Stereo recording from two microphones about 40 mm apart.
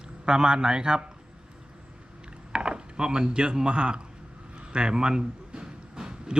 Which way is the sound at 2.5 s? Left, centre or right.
Right.